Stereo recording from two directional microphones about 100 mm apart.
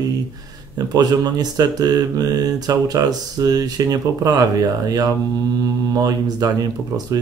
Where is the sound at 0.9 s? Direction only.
45° right (ahead or behind).